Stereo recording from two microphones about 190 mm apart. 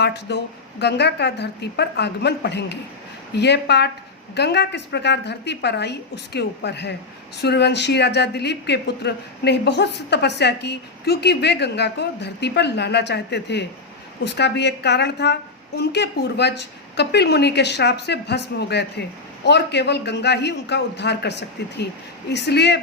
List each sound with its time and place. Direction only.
0.0 s speech: 60° left (ahead or behind)